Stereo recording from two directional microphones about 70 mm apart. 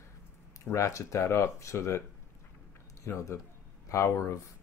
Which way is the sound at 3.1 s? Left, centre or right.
Left.